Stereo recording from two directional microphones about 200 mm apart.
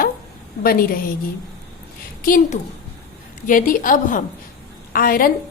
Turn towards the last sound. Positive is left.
turn(degrees=45)  # may be behind; listen again after turning